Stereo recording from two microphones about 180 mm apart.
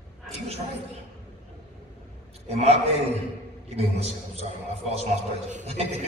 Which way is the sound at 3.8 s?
35° right (ahead or behind).